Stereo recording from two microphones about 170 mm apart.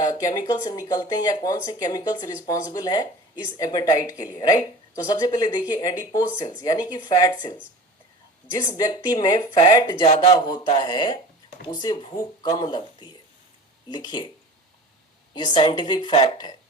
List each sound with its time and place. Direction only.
0.0 s speech: 20° left (ahead or behind)
8.5 s speech: 25° left (ahead or behind)
15.4 s speech: 25° left (ahead or behind)